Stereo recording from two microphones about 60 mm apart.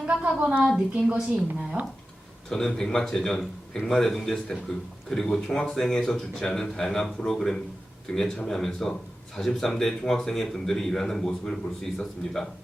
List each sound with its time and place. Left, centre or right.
0.0 s a sound: right
0.9 s a woman's voice: centre
2.5 s speech: centre